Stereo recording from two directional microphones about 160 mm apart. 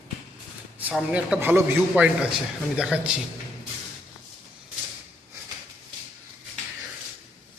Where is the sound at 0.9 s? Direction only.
5° right (ahead or behind).